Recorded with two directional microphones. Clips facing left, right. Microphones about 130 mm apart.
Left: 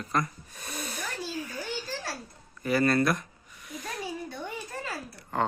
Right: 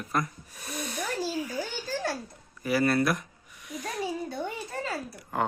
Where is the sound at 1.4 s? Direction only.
15° right (ahead or behind).